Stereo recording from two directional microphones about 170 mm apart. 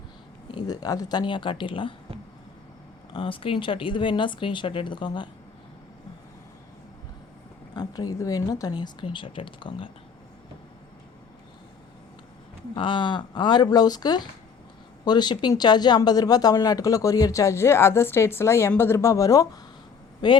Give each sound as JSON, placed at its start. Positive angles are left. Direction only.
{"t": 0.5, "sound": "speech", "side_deg": 20}
{"t": 3.1, "sound": "speech", "side_deg": 30}
{"t": 7.8, "sound": "speech", "side_deg": 20}
{"t": 12.7, "sound": "speech", "side_deg": 30}